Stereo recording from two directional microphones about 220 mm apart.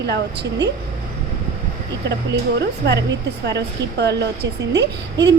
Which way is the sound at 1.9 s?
50° right (ahead or behind).